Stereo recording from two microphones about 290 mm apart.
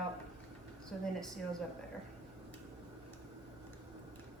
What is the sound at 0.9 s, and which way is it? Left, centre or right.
Speech, centre.